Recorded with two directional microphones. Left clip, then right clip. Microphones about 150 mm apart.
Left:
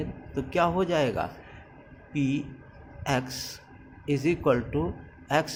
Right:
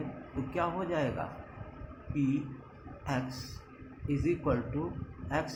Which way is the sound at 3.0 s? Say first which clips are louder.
Left 8 dB; 65° left (ahead or behind).